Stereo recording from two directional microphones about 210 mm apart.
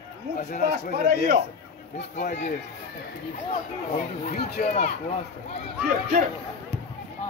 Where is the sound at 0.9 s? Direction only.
45° right (ahead or behind).